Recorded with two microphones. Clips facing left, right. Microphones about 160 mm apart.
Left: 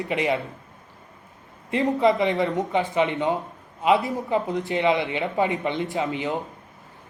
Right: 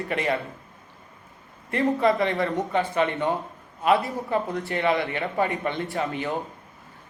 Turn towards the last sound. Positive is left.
turn(degrees=20)  # may be behind; listen again after turning